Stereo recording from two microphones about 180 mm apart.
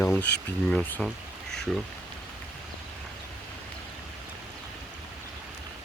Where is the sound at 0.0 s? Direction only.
10° left (ahead or behind).